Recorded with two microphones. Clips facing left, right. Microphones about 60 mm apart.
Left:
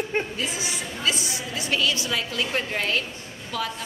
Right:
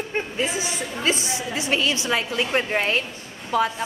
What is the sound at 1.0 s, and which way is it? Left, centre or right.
A woman's voice, right.